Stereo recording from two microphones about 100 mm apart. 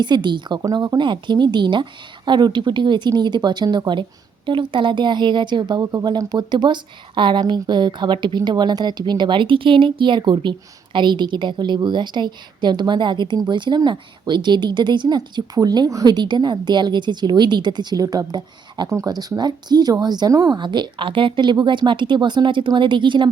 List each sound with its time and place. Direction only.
0.0 s a woman's voice: 50° right (ahead or behind)
0.6 s a woman's voice: 40° right (ahead or behind)
20.6 s a woman's voice: 50° right (ahead or behind)